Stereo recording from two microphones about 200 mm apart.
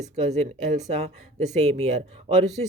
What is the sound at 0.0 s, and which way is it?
Speech, 35° right (ahead or behind).